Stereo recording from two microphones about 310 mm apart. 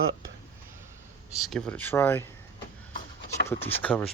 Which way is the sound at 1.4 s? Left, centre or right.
Centre.